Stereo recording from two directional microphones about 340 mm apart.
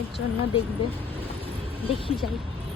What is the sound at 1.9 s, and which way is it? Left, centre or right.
Speech, centre.